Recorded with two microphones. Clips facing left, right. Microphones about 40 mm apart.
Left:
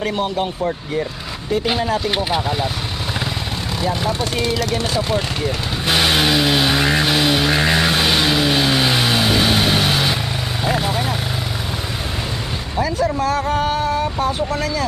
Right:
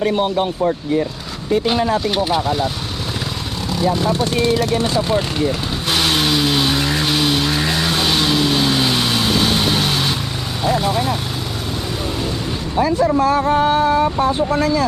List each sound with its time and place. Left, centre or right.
1.6 s vehicle: centre
5.9 s vehicle: centre
7.5 s vehicle: left
13.0 s speech: right
13.7 s vehicle: right